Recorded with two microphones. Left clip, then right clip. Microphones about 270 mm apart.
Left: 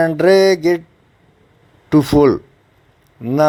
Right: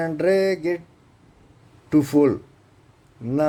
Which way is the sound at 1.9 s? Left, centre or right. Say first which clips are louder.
Left 6 dB; centre.